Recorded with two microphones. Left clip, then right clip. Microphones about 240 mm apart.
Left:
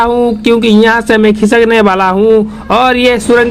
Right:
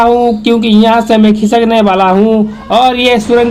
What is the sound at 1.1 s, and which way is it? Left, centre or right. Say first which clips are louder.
Speech: left 1 dB; left.